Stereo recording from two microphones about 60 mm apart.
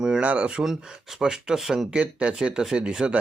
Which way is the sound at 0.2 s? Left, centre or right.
Right.